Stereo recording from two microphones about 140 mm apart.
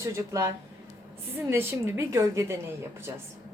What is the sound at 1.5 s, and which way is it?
A woman's voice, 20° right (ahead or behind).